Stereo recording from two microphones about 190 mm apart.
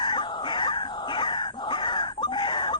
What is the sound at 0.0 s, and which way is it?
Screaming, 25° left (ahead or behind).